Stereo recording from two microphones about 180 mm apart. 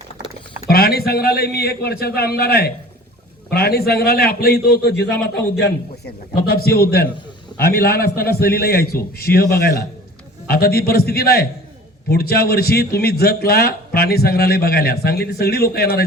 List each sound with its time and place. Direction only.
0.7 s a man's voice: 60° left (ahead or behind)